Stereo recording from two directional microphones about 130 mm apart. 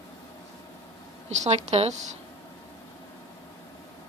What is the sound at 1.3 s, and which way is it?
Speech, 55° right (ahead or behind).